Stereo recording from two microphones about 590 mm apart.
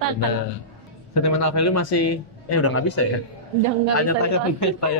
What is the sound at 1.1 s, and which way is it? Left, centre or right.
A man's voice, left.